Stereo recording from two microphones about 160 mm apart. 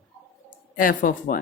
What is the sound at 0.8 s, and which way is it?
Speech, 60° left (ahead or behind).